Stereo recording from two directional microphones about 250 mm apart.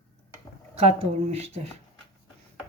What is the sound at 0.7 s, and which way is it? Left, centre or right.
Speech, right.